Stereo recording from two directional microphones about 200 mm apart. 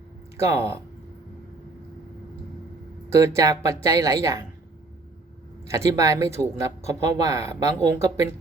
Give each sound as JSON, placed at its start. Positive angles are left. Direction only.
{"t": 0.3, "sound": "speech", "side_deg": -15}
{"t": 3.1, "sound": "speech", "side_deg": -15}
{"t": 5.6, "sound": "speech", "side_deg": -15}